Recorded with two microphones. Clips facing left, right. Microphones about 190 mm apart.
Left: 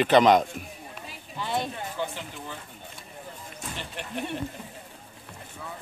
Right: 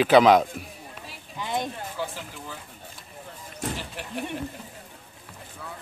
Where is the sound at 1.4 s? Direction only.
15° right (ahead or behind).